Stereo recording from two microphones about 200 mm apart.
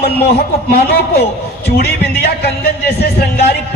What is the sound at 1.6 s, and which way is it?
A man's voice, 55° left (ahead or behind).